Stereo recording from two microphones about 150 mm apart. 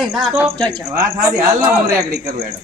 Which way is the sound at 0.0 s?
Centre (ahead or behind).